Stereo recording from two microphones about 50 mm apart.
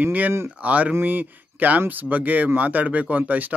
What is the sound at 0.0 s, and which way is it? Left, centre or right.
Speech, right.